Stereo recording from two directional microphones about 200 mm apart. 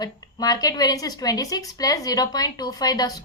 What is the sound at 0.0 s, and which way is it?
A woman's voice, 20° left (ahead or behind).